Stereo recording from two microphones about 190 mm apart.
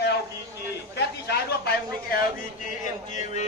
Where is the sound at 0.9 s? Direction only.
60° left (ahead or behind).